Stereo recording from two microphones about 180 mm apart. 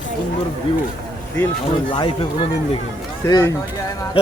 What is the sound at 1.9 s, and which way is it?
Speech, 30° left (ahead or behind).